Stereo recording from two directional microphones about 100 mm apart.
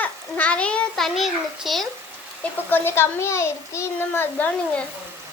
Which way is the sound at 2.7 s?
20° left (ahead or behind).